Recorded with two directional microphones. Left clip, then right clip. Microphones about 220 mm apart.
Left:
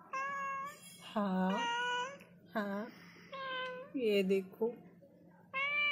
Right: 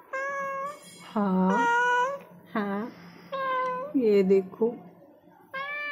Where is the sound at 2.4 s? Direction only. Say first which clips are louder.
Right 7 dB; 20° right (ahead or behind).